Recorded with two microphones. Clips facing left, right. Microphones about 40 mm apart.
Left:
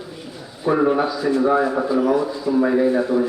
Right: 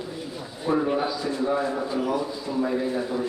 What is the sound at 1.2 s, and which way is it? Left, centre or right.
A man's voice, left.